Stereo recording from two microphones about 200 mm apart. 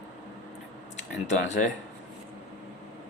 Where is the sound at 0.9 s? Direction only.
35° left (ahead or behind).